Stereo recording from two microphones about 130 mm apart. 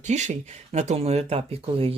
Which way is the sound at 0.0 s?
60° right (ahead or behind).